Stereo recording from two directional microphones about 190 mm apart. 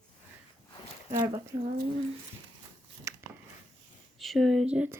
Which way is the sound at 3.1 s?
15° right (ahead or behind).